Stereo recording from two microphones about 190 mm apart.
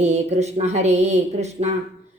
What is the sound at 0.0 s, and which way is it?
A woman's voice, 35° right (ahead or behind).